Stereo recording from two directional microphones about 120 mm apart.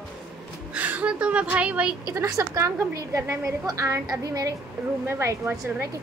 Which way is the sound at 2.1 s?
25° right (ahead or behind).